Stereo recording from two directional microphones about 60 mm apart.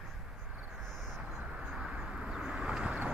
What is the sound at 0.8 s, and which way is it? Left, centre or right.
Vehicle, centre.